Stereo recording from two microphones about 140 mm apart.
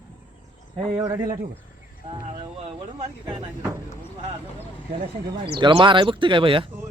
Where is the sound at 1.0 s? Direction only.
25° right (ahead or behind).